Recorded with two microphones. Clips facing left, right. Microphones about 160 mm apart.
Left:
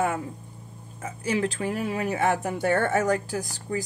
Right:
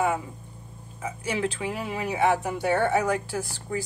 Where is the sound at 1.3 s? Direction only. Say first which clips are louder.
Left 3 dB; 45° left (ahead or behind).